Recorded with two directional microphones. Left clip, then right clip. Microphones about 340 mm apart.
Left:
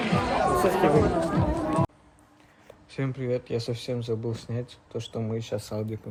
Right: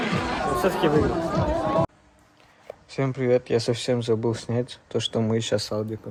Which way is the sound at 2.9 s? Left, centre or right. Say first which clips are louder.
Right 7 dB; centre.